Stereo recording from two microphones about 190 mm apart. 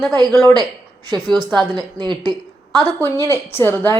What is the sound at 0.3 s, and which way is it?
Speech, centre (ahead or behind).